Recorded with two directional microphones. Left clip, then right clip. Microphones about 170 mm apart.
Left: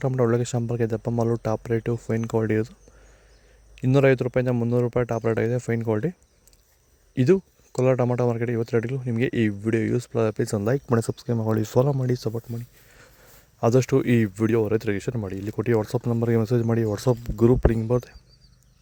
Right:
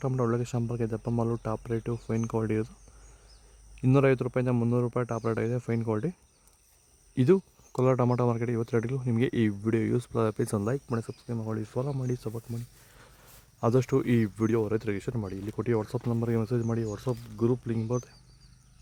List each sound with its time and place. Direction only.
0.0 s speech: 20° left (ahead or behind)
3.9 s speech: 15° left (ahead or behind)
7.2 s speech: 10° left (ahead or behind)
10.8 s speech: 40° left (ahead or behind)